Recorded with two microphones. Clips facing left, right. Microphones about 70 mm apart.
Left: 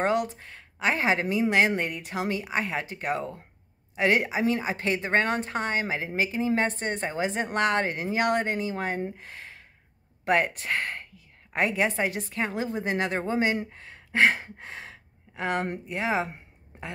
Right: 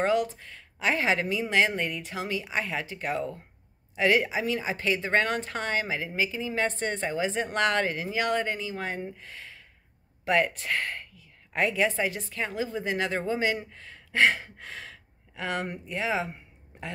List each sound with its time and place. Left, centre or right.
0.0 s speech: left
9.0 s gasp: left
10.2 s speech: left